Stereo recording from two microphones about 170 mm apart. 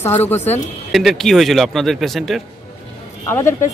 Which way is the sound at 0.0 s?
10° left (ahead or behind).